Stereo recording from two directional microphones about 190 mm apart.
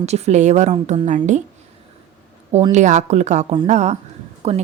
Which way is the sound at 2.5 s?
35° right (ahead or behind).